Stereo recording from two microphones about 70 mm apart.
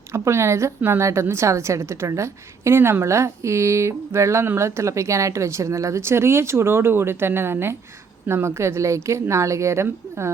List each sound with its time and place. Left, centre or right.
0.1 s a woman's voice: right